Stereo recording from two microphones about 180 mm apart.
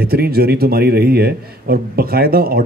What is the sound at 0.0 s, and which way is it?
A man's voice, 60° right (ahead or behind).